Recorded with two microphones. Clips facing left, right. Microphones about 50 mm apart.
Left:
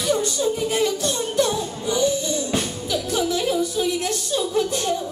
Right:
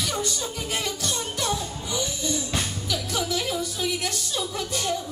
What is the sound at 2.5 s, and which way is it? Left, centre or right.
Music, centre.